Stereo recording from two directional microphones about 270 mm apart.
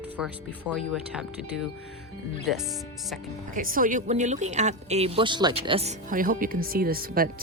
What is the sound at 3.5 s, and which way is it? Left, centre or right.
A woman's voice, right.